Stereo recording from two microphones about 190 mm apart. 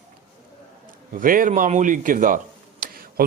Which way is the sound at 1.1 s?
45° right (ahead or behind).